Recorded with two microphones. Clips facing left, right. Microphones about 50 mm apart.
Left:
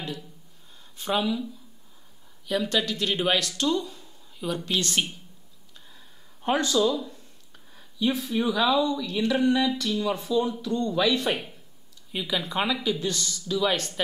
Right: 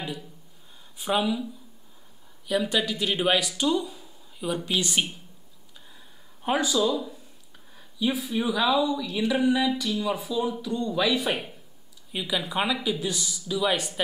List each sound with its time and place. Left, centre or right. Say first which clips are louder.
0.0 s speech: right 1 dB; centre
6.4 s speech: left 1 dB; centre